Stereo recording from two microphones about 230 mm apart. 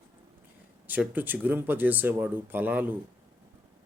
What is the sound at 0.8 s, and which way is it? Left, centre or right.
Speech, centre.